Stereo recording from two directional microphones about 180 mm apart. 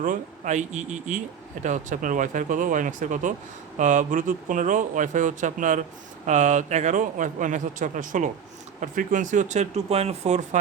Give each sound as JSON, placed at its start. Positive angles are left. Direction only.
{"t": 0.0, "sound": "a man's voice", "side_deg": -45}